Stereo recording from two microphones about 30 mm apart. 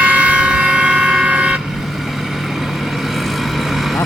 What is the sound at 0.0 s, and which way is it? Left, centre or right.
Vehicle, right.